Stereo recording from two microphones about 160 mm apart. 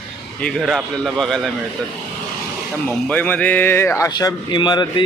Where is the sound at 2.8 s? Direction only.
10° left (ahead or behind).